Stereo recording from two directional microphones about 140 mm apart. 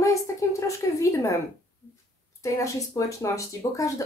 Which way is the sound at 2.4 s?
20° left (ahead or behind).